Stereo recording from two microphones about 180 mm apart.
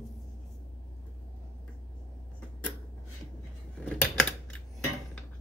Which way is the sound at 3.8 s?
5° left (ahead or behind).